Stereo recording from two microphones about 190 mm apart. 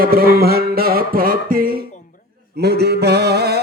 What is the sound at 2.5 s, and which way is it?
Mantra, 60° right (ahead or behind).